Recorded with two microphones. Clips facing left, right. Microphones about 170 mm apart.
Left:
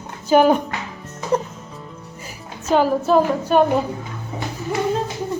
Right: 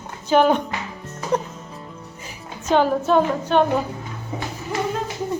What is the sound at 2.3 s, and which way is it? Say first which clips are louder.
A woman's voice: left 1 dB; 5° left (ahead or behind).